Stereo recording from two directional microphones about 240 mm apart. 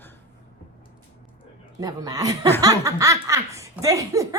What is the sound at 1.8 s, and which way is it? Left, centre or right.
A woman's voice, centre.